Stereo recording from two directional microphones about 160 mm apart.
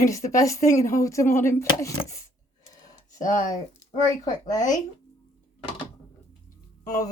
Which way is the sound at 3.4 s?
20° left (ahead or behind).